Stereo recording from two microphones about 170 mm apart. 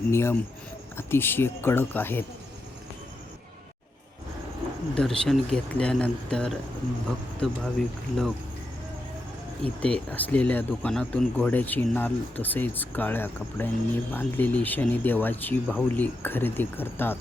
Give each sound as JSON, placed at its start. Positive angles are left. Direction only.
{"t": 0.1, "sound": "speech", "side_deg": 15}
{"t": 4.9, "sound": "speech", "side_deg": 5}
{"t": 9.6, "sound": "speech", "side_deg": 10}